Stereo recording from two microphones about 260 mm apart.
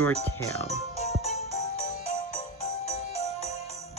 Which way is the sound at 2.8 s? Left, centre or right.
Left.